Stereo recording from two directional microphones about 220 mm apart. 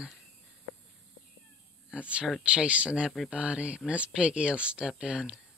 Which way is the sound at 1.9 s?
5° right (ahead or behind).